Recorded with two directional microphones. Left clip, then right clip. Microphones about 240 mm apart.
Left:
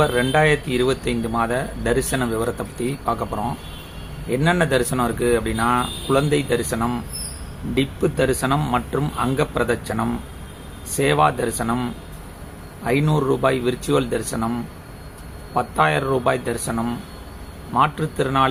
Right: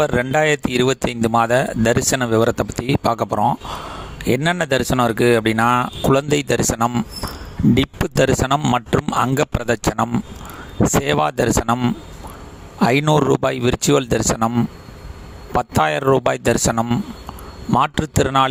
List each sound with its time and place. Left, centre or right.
0.0 s speech: right
12.9 s speech: right
15.5 s speech: right